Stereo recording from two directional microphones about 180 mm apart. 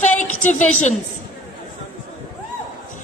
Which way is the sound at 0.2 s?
40° left (ahead or behind).